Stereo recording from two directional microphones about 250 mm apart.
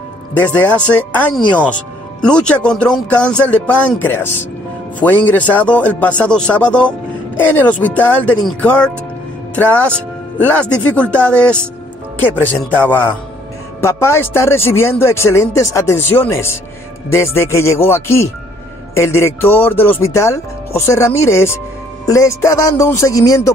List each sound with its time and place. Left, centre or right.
0.4 s speech: centre